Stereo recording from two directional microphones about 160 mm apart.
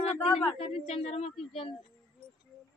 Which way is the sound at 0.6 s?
40° left (ahead or behind).